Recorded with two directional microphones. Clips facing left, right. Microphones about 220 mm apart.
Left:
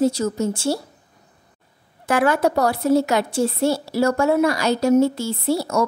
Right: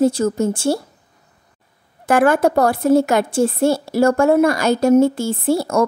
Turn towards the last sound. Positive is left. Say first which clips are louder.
# right 3 dB
turn(degrees=-50)  # may be behind; listen again after turning